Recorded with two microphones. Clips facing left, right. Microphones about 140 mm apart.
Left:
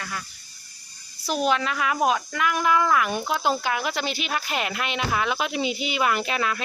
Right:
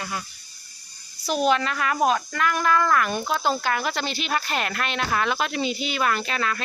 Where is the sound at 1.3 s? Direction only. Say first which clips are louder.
Right 2 dB; centre (ahead or behind).